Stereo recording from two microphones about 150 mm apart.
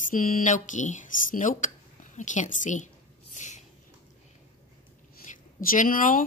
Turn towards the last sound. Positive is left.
turn(degrees=65)  # may be behind; listen again after turning